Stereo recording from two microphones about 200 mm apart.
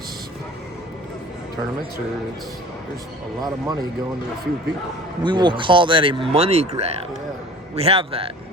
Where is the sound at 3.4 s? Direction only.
20° right (ahead or behind).